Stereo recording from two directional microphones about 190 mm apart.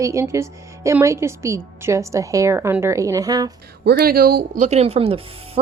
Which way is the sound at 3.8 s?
55° right (ahead or behind).